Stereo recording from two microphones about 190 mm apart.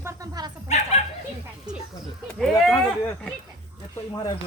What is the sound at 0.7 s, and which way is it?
Dog, 35° left (ahead or behind).